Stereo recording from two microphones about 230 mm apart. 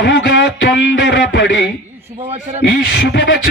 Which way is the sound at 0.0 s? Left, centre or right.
Left.